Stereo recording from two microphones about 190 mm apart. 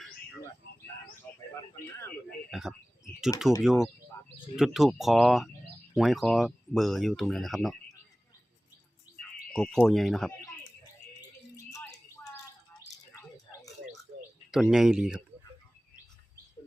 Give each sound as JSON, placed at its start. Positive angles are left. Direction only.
{"t": 1.2, "sound": "a sound", "side_deg": 10}
{"t": 2.5, "sound": "typing", "side_deg": 0}
{"t": 3.6, "sound": "speech", "side_deg": 0}
{"t": 9.5, "sound": "speech", "side_deg": 5}
{"t": 11.5, "sound": "bird", "side_deg": 15}
{"t": 12.9, "sound": "a sound", "side_deg": 20}
{"t": 14.5, "sound": "speech", "side_deg": 0}